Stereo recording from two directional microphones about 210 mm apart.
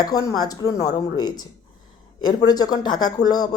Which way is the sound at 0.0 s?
15° left (ahead or behind).